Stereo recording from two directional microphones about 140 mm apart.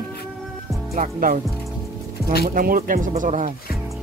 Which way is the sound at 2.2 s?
90° right.